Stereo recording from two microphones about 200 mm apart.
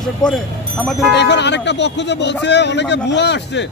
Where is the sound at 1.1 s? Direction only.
60° left (ahead or behind).